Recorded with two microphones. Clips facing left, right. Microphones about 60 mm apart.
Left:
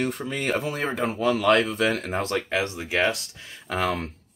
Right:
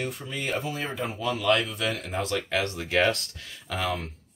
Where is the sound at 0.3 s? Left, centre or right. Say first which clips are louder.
Left 4 dB; left.